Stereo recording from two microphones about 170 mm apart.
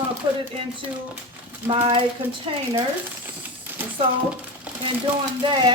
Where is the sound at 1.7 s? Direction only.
35° right (ahead or behind).